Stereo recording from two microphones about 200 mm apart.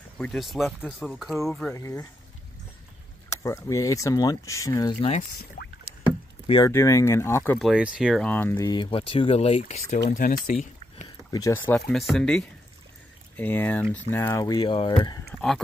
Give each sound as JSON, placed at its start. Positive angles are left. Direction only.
{"t": 0.2, "sound": "speech", "side_deg": 0}
{"t": 1.7, "sound": "speech", "side_deg": 15}
{"t": 3.4, "sound": "speech", "side_deg": 15}
{"t": 5.6, "sound": "rowboat", "side_deg": 45}
{"t": 6.4, "sound": "speech", "side_deg": 25}
{"t": 6.7, "sound": "speech", "side_deg": 15}
{"t": 7.5, "sound": "speech", "side_deg": 0}
{"t": 10.0, "sound": "speech", "side_deg": 45}
{"t": 10.5, "sound": "a sound", "side_deg": 35}
{"t": 11.2, "sound": "speech", "side_deg": 15}